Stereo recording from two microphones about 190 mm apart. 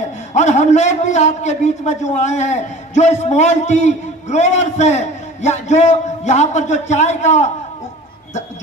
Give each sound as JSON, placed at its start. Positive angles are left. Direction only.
{"t": 0.3, "sound": "a man's voice", "side_deg": 40}